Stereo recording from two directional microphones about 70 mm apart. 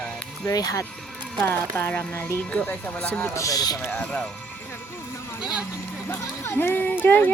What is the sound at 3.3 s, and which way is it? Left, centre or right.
Speech, left.